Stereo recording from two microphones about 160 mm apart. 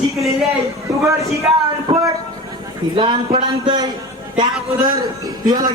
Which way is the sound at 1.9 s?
25° right (ahead or behind).